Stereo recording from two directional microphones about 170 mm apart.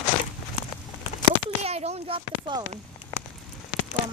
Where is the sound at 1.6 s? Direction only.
40° right (ahead or behind).